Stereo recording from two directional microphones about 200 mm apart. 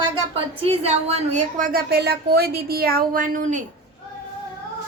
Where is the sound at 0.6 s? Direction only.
30° right (ahead or behind).